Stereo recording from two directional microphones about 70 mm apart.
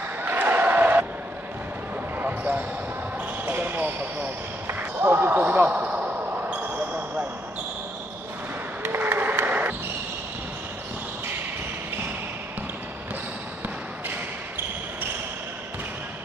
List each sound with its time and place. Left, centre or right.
0.2 s a sound: right
2.1 s basketball bounce: right
8.8 s applause: right